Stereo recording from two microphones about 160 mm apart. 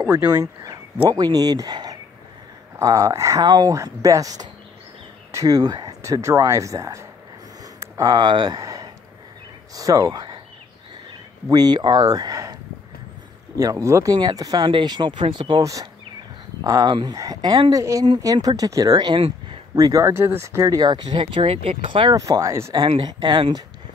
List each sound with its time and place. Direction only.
0.0 s speech: 10° right (ahead or behind)
7.6 s a sound: 20° right (ahead or behind)
9.8 s speech: 20° right (ahead or behind)
11.4 s speech: 25° right (ahead or behind)
13.6 s speech: 20° right (ahead or behind)
22.1 s speech: 20° right (ahead or behind)
22.8 s speech: 30° right (ahead or behind)